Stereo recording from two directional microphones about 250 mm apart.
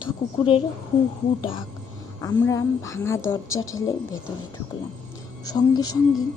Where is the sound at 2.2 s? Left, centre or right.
Centre.